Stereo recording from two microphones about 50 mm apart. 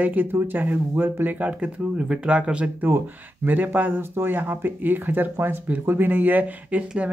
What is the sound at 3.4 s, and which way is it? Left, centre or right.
Speech, right.